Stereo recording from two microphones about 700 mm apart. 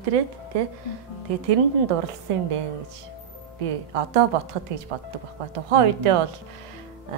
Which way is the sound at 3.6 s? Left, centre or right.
Right.